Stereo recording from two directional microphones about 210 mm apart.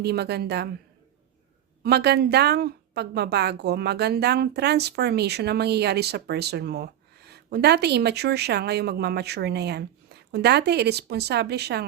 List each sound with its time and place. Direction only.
0.0 s a woman's voice: 50° right (ahead or behind)
1.8 s a woman's voice: 50° right (ahead or behind)